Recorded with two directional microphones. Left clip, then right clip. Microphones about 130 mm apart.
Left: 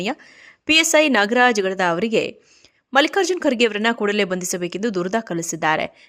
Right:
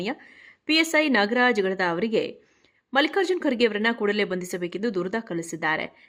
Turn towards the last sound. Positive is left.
turn(degrees=40)  # may be behind; listen again after turning